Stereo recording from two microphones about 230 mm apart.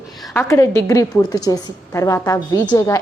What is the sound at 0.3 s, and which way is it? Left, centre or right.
A woman's voice, centre.